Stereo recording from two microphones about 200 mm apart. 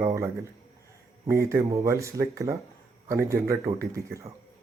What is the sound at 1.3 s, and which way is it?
Speech, 15° right (ahead or behind).